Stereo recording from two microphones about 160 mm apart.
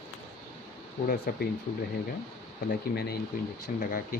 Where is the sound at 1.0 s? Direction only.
60° left (ahead or behind).